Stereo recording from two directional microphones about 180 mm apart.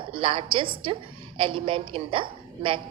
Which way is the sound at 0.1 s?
30° right (ahead or behind).